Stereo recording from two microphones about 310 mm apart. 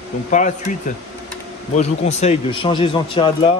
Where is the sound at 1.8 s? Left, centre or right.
Left.